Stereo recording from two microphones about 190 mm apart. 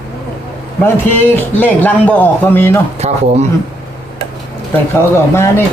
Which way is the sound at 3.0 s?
35° right (ahead or behind).